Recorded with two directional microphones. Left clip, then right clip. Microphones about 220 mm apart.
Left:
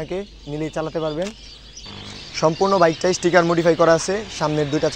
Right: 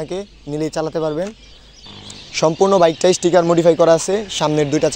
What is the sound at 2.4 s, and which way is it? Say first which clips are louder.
A man's voice: right 3 dB; 50° right (ahead or behind).